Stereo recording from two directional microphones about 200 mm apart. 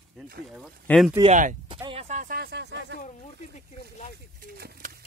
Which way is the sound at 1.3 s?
40° right (ahead or behind).